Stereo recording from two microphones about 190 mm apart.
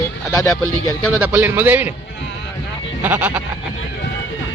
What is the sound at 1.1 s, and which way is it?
Speech, 10° right (ahead or behind).